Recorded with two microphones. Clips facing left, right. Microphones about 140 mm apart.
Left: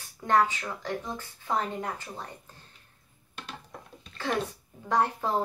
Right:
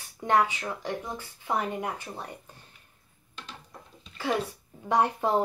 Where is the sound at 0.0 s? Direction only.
15° right (ahead or behind).